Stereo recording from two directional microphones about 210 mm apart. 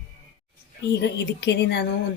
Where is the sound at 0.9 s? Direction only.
50° left (ahead or behind).